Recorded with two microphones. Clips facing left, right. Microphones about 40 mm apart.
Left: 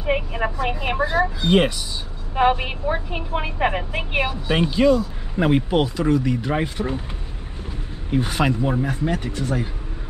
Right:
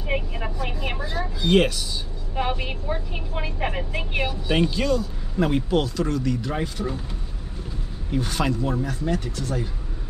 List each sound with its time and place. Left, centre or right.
0.0 s speech: left
1.4 s speech: centre
8.1 s speech: left